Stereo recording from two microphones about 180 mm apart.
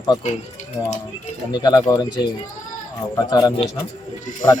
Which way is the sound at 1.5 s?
20° left (ahead or behind).